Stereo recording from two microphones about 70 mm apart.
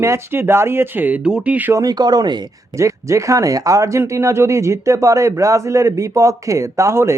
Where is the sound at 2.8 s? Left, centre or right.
Right.